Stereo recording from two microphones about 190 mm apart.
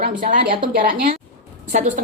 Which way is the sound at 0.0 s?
45° right (ahead or behind).